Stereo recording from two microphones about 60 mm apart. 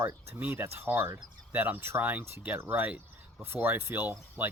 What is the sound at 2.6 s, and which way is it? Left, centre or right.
Speech, right.